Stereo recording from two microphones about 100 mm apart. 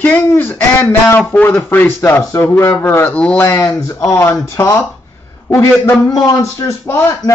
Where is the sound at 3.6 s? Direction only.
30° left (ahead or behind).